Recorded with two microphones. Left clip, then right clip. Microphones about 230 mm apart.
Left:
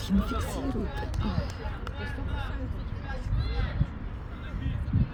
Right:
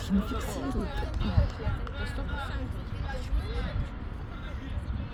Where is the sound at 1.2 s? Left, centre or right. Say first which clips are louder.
Right 1 dB; centre.